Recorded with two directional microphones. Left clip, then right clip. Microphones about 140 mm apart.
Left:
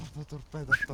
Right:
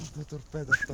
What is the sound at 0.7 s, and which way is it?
Speech, 10° left (ahead or behind).